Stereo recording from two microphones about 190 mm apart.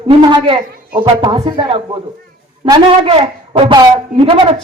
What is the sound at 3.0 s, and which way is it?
A man's voice, 30° right (ahead or behind).